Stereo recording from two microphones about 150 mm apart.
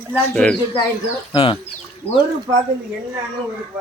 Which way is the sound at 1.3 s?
40° left (ahead or behind).